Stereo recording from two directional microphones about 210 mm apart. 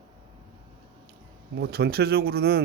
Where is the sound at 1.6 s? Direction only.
50° right (ahead or behind).